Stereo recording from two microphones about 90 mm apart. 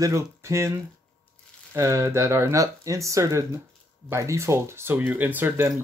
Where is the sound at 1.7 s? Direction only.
30° right (ahead or behind).